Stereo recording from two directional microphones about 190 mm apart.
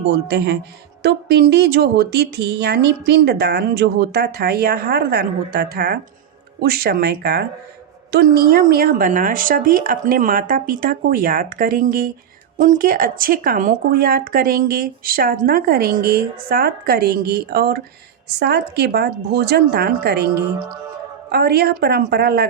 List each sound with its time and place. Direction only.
0.1 s speech: 60° right (ahead or behind)